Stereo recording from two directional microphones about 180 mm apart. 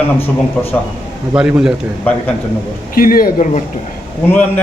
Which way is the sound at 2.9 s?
55° left (ahead or behind).